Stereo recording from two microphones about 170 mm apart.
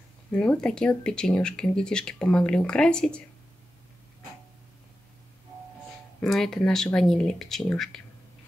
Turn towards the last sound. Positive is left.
turn(degrees=0)  # may be behind; listen again after turning